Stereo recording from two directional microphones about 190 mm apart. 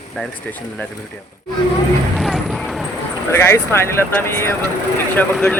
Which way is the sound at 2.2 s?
Centre (ahead or behind).